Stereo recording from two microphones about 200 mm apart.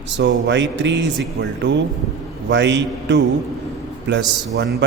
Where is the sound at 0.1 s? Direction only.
65° right (ahead or behind).